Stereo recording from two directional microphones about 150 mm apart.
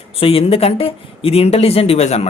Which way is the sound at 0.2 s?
40° left (ahead or behind).